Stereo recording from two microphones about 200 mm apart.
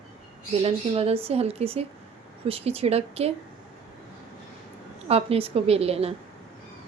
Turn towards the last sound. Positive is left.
turn(degrees=-30)  # may be behind; listen again after turning